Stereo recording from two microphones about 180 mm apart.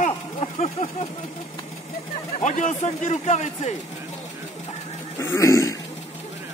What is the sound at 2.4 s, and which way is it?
Speech, 40° left (ahead or behind).